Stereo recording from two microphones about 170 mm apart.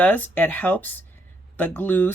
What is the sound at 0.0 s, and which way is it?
Speech, 10° left (ahead or behind).